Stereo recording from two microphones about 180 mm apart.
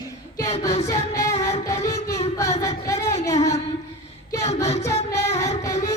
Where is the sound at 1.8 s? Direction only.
20° left (ahead or behind).